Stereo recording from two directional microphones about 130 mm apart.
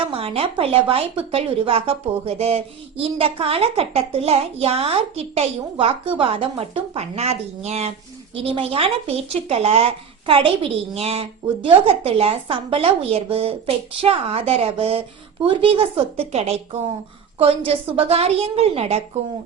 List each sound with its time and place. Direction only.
0.1 s a woman's voice: 45° right (ahead or behind)